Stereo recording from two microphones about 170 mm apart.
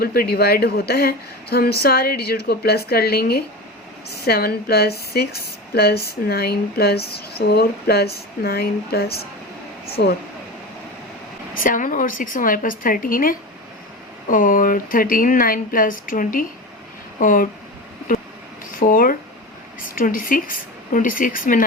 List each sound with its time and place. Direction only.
0.0 s a woman's voice: 60° left (ahead or behind)
11.5 s a woman's voice: 55° left (ahead or behind)
18.8 s a woman's voice: 55° left (ahead or behind)